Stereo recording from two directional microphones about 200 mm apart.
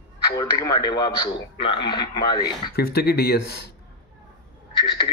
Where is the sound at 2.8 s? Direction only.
50° left (ahead or behind).